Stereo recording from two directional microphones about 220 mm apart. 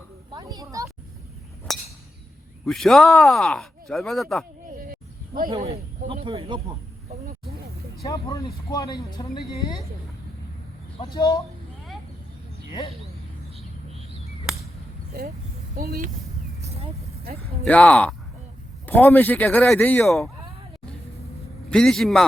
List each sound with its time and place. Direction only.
0.3 s speech: 20° right (ahead or behind)
1.7 s a sound: centre (ahead or behind)
2.6 s speech: centre (ahead or behind)
4.6 s a sound: 40° right (ahead or behind)
5.5 s speech: 30° right (ahead or behind)
8.0 s speech: 15° left (ahead or behind)
11.1 s speech: 15° left (ahead or behind)
16.6 s vehicle: 30° right (ahead or behind)
17.6 s speech: 5° left (ahead or behind)
21.7 s speech: 5° left (ahead or behind)